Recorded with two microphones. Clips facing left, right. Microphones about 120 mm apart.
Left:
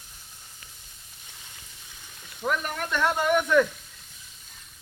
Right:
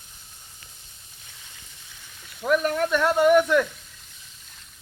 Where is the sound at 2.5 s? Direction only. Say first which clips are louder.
Right 7 dB; 5° right (ahead or behind).